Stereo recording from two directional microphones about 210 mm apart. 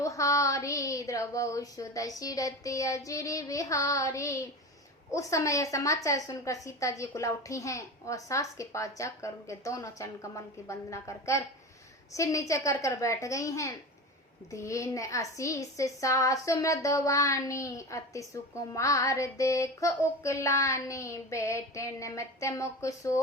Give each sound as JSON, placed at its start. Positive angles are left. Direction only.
{"t": 0.0, "sound": "a woman's voice", "side_deg": 15}